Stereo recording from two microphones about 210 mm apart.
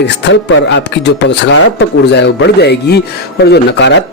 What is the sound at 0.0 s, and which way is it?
A man's voice, 55° left (ahead or behind).